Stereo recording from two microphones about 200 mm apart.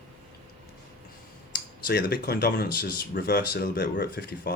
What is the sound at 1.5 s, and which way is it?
Speech, 50° left (ahead or behind).